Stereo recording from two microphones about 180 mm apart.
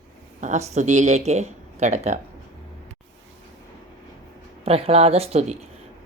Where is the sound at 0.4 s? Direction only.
40° right (ahead or behind).